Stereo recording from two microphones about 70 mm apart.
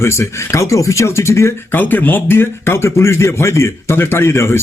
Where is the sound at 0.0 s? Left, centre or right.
Left.